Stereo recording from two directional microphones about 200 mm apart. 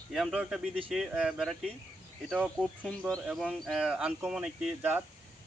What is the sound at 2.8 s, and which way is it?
Speech, 5° left (ahead or behind).